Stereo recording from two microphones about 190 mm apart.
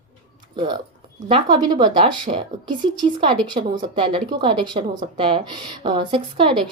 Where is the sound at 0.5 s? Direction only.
25° right (ahead or behind).